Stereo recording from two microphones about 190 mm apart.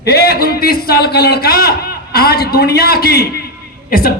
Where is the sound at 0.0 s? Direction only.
55° left (ahead or behind).